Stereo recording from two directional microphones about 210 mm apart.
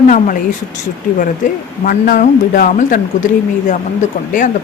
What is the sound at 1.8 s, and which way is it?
Speech, 45° left (ahead or behind).